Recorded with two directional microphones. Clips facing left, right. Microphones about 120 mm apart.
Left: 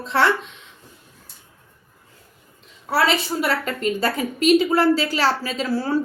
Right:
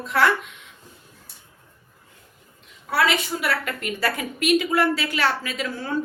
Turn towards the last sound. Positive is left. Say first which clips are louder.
# left 6 dB
turn(degrees=35)  # may be behind; listen again after turning